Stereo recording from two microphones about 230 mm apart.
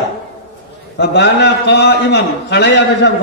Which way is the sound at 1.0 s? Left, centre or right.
Left.